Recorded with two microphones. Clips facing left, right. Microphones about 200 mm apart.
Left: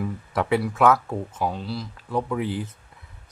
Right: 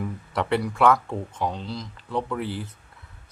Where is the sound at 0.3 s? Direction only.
5° left (ahead or behind).